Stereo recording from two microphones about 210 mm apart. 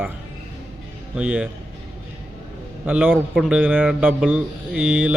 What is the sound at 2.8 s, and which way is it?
A man's voice, 10° right (ahead or behind).